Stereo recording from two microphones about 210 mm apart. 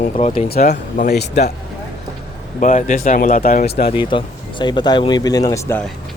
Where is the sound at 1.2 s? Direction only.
50° left (ahead or behind).